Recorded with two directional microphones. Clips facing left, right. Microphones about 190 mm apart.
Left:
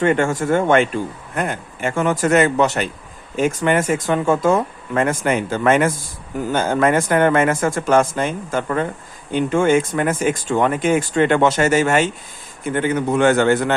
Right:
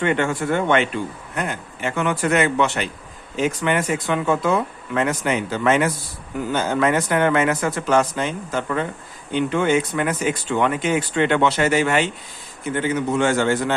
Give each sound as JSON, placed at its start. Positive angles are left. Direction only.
{"t": 0.0, "sound": "a man's voice", "side_deg": 45}